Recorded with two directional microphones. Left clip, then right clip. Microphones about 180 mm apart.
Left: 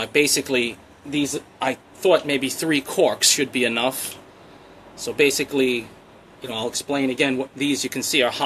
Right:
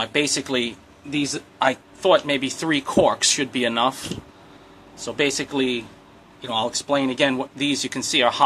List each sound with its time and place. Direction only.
0.0 s speech: 25° right (ahead or behind)